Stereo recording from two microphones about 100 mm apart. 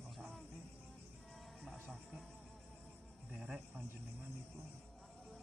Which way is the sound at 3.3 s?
5° right (ahead or behind).